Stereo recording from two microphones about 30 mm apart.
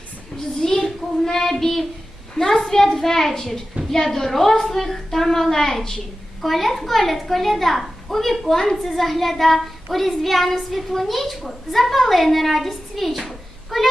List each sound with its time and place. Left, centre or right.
0.3 s a child's voice: left
0.8 s a woman's voice: centre
6.4 s a child's voice: centre